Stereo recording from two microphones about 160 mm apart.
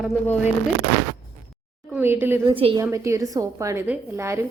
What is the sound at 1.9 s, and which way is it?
Speech, 15° right (ahead or behind).